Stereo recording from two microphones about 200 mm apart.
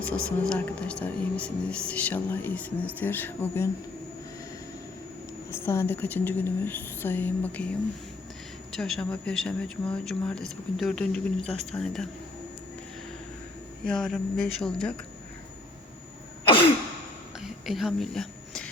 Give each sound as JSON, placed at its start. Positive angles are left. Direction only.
{"t": 0.0, "sound": "speech", "side_deg": 5}
{"t": 5.5, "sound": "speech", "side_deg": 10}
{"t": 8.7, "sound": "speech", "side_deg": 0}
{"t": 13.8, "sound": "speech", "side_deg": 5}
{"t": 17.4, "sound": "a sound", "side_deg": 0}